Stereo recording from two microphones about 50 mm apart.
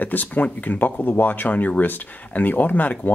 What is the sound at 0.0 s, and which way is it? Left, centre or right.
Speech, left.